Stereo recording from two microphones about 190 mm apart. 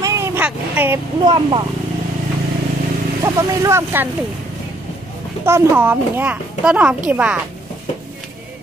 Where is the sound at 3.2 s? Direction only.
15° right (ahead or behind).